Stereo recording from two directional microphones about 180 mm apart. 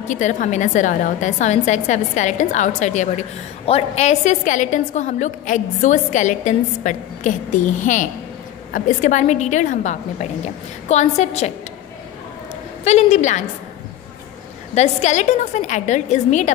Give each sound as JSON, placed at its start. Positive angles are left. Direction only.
{"t": 0.1, "sound": "a woman's voice", "side_deg": 40}
{"t": 12.8, "sound": "a woman's voice", "side_deg": 40}
{"t": 14.8, "sound": "a woman's voice", "side_deg": 40}